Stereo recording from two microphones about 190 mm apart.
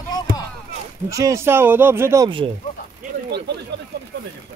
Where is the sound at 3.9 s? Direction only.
60° right (ahead or behind).